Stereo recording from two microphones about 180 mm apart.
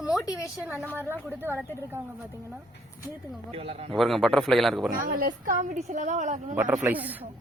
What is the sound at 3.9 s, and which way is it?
Speech, centre (ahead or behind).